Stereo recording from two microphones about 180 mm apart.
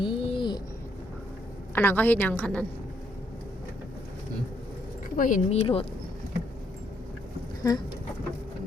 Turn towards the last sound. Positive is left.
turn(degrees=20)  # may be behind; listen again after turning